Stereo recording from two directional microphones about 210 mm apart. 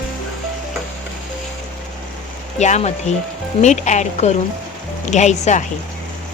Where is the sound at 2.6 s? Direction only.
35° left (ahead or behind).